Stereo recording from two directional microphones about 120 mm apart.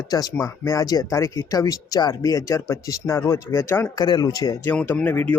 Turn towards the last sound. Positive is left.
turn(degrees=15)  # may be behind; listen again after turning